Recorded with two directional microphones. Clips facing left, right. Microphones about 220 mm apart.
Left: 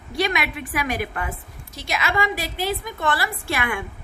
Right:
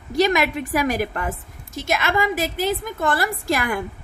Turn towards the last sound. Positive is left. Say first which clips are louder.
# right 4 dB
turn(degrees=-40)  # may be behind; listen again after turning